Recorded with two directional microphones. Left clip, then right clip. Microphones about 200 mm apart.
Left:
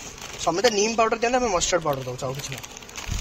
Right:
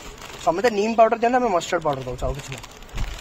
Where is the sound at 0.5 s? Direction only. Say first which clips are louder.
Right 1 dB; 50° right (ahead or behind).